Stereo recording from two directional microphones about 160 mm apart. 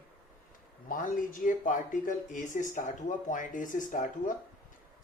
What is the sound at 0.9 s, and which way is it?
Speech, 55° left (ahead or behind).